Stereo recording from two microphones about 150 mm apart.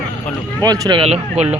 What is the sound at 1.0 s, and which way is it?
Speech, 45° right (ahead or behind).